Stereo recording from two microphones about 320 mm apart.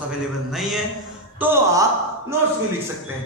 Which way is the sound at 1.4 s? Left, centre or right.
Centre.